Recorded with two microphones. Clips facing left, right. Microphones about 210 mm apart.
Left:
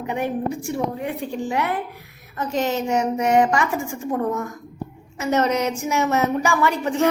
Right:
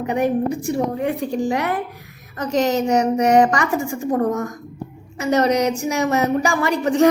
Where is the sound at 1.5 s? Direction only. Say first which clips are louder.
Right 2 dB; 40° right (ahead or behind).